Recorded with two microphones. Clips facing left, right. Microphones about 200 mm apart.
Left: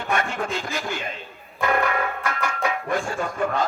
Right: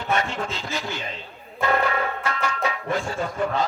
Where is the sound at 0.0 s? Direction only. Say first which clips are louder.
Even; 55° left (ahead or behind).